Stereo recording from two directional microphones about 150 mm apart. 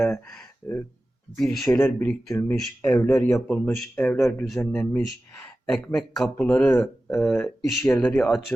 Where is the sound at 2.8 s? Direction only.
15° left (ahead or behind).